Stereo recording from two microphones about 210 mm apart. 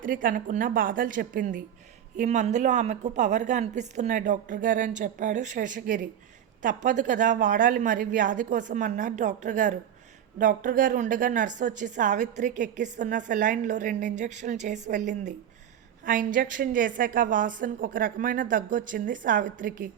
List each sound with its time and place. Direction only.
0.0 s a woman's voice: 40° right (ahead or behind)